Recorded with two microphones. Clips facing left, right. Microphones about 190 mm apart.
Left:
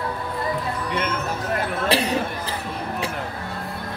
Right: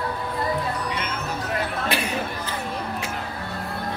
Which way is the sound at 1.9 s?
35° left (ahead or behind).